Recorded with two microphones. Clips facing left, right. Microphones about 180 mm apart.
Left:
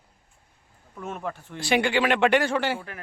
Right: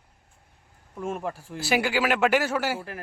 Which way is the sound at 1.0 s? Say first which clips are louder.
Right 2 dB; 5° right (ahead or behind).